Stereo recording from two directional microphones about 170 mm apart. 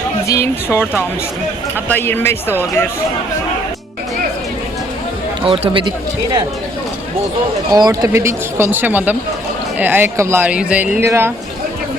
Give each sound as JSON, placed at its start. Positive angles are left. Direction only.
{"t": 0.3, "sound": "speech", "side_deg": 15}
{"t": 1.9, "sound": "speech", "side_deg": 15}
{"t": 5.5, "sound": "speech", "side_deg": -35}
{"t": 7.7, "sound": "speech", "side_deg": -20}